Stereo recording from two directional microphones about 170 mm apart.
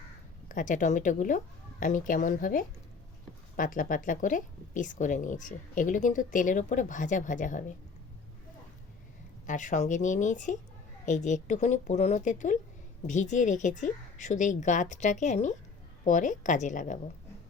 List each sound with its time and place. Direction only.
0.4 s a woman's voice: 50° left (ahead or behind)
9.5 s a woman's voice: 45° left (ahead or behind)